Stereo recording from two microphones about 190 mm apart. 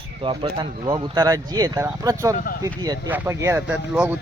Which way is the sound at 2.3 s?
50° left (ahead or behind).